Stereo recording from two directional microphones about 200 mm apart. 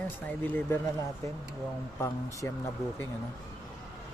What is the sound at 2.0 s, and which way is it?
Speech, 15° left (ahead or behind).